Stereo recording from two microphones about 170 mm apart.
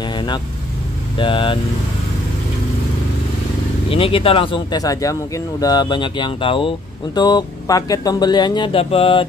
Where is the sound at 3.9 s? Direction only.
35° left (ahead or behind).